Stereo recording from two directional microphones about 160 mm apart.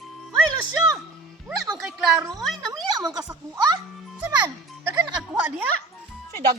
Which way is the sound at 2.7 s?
25° right (ahead or behind).